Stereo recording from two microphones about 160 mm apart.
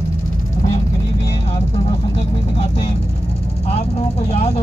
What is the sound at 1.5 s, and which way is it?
Vehicle, 40° left (ahead or behind).